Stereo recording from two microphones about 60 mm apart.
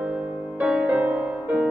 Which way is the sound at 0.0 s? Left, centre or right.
Centre.